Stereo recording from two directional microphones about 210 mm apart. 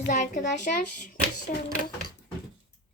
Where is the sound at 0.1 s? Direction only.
35° left (ahead or behind).